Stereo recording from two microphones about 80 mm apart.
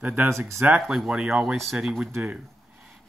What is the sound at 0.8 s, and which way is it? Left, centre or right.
Speech, centre.